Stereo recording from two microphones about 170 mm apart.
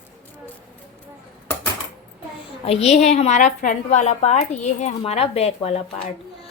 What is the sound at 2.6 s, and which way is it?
A woman's voice, 35° left (ahead or behind).